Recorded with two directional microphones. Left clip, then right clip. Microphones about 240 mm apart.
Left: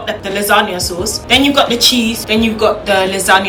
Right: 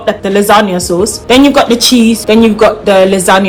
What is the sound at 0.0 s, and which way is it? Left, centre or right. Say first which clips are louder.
Speech: right 8 dB; centre.